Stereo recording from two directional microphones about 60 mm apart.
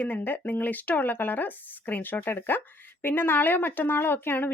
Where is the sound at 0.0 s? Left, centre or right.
Left.